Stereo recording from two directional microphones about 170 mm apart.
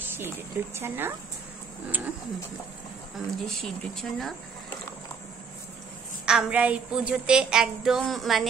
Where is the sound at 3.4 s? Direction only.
Centre (ahead or behind).